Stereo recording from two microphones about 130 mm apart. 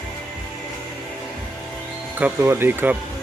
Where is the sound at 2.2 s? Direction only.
15° right (ahead or behind).